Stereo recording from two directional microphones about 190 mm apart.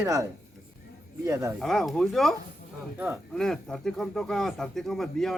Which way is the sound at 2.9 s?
10° right (ahead or behind).